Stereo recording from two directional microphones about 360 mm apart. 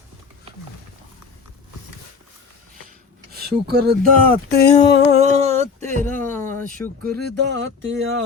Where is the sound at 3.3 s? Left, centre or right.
Right.